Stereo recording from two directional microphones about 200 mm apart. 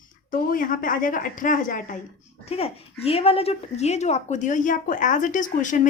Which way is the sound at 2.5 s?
30° left (ahead or behind).